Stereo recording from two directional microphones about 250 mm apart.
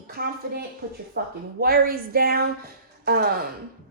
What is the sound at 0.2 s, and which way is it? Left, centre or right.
A woman's voice, right.